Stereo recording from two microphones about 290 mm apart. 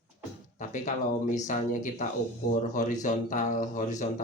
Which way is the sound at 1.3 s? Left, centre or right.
Left.